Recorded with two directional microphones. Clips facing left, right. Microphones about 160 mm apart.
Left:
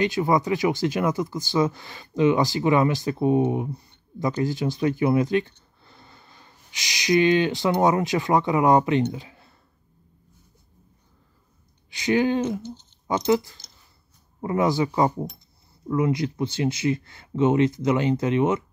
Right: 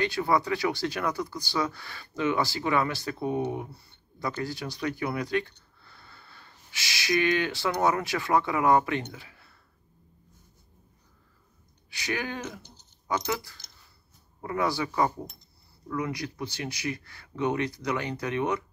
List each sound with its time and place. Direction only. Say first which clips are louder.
0.0 s speech: left 4 dB; 20° left (ahead or behind)
11.9 s speech: left 12 dB; 20° left (ahead or behind)